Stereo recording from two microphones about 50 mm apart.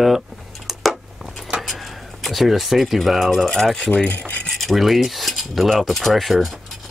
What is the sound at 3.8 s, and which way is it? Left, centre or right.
Speech, left.